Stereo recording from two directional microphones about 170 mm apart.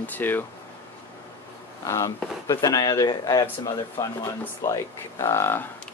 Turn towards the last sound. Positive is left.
turn(degrees=15)  # may be behind; listen again after turning